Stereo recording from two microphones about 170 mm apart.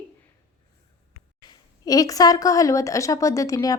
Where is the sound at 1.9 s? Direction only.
20° left (ahead or behind).